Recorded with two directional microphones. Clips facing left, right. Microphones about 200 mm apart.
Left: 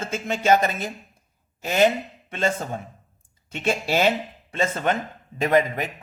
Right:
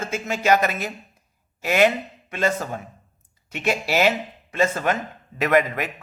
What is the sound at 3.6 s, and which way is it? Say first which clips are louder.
Speech: right 1 dB; 30° left (ahead or behind).